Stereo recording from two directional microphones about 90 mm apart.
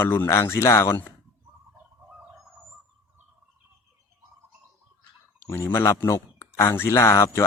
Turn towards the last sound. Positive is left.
turn(degrees=30)  # may be behind; listen again after turning